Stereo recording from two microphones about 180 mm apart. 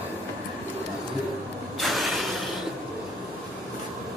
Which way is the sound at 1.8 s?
Centre (ahead or behind).